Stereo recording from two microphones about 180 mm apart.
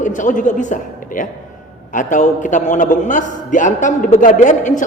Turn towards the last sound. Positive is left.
turn(degrees=45)  # may be behind; listen again after turning